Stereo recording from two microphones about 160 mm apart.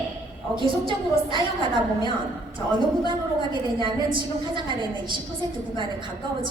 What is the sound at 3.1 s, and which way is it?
A woman's voice, 30° right (ahead or behind).